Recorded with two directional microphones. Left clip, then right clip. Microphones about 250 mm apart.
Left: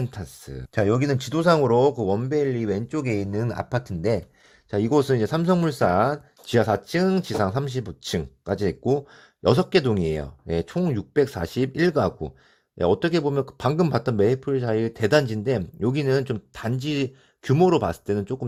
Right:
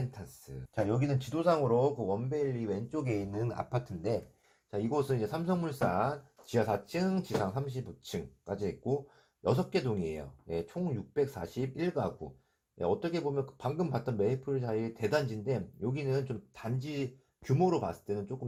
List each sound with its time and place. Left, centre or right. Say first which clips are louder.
0.9 s speech: left 11 dB; left